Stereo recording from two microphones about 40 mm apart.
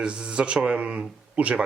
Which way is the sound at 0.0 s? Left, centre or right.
Right.